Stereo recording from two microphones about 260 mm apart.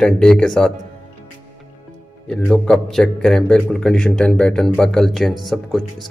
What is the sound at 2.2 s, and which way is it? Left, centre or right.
Speech, centre.